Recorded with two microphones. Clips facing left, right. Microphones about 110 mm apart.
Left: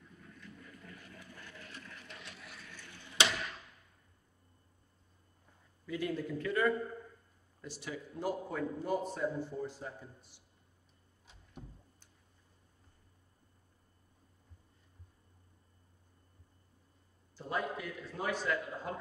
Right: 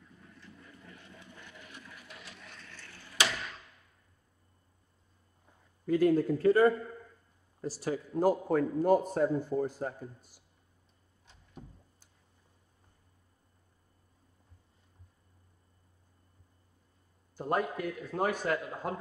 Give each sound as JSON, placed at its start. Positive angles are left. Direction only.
{"t": 0.4, "sound": "a sound", "side_deg": -25}
{"t": 5.9, "sound": "a man's voice", "side_deg": -45}
{"t": 17.4, "sound": "a man's voice", "side_deg": -50}